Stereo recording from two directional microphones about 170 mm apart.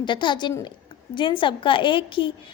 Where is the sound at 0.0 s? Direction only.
25° left (ahead or behind).